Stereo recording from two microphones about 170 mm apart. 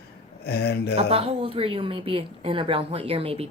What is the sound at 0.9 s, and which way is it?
A woman's voice, 35° right (ahead or behind).